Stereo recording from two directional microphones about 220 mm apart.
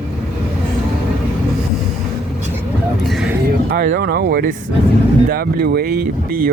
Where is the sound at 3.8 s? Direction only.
40° right (ahead or behind).